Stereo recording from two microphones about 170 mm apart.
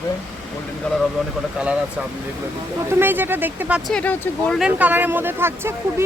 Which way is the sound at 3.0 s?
10° right (ahead or behind).